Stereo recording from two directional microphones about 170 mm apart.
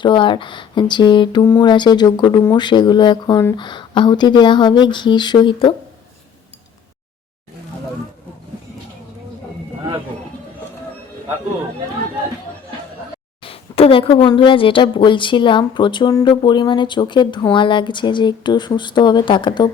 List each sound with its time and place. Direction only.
0.0 s speech: 30° left (ahead or behind)
13.4 s speech: 35° left (ahead or behind)